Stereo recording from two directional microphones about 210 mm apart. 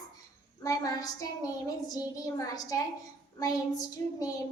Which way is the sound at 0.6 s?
15° left (ahead or behind).